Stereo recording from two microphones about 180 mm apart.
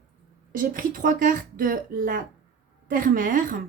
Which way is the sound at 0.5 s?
50° right (ahead or behind).